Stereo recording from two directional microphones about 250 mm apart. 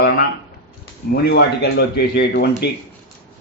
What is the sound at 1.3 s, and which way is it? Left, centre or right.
Speech, left.